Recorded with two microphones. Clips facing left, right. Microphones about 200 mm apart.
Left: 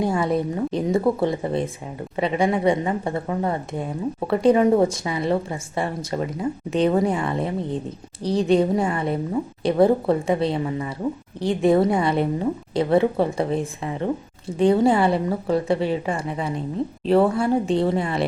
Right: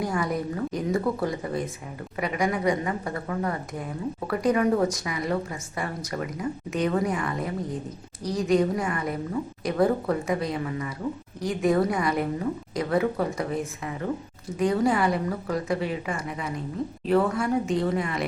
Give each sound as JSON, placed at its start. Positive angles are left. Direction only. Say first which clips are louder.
{"t": 0.0, "sound": "a woman's voice", "louder": "left 6 dB", "side_deg": 25}